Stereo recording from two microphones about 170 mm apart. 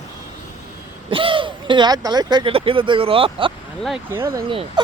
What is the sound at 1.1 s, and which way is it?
Speech, 30° right (ahead or behind).